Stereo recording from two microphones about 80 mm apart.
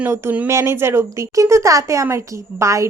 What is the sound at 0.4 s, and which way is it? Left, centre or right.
Speech, right.